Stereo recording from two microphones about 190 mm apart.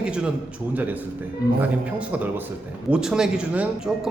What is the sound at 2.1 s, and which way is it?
A man's voice, 10° right (ahead or behind).